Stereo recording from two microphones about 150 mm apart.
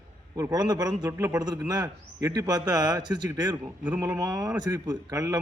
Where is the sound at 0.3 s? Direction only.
20° right (ahead or behind).